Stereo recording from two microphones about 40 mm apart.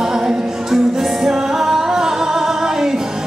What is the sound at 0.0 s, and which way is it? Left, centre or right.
Music, centre.